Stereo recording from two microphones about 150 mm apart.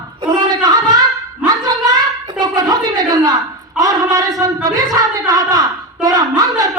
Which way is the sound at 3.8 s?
25° right (ahead or behind).